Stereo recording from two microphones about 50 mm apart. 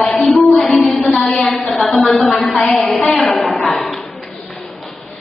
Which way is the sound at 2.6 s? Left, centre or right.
Centre.